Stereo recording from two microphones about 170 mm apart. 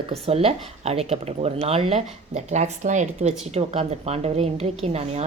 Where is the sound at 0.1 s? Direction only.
35° right (ahead or behind).